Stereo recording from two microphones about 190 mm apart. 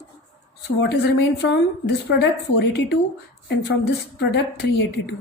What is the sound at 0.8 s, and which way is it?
Speech, 60° left (ahead or behind).